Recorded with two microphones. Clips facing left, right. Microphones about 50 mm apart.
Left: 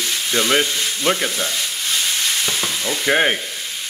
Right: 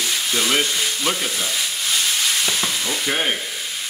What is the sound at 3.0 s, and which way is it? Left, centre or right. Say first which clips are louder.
Frying: left 7 dB; left.